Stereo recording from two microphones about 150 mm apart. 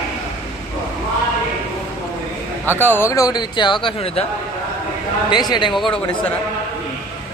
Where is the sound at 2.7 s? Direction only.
15° left (ahead or behind); by 4.2 s 35° left (ahead or behind).